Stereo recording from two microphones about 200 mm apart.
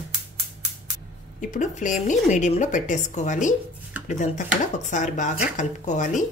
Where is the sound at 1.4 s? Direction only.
40° left (ahead or behind).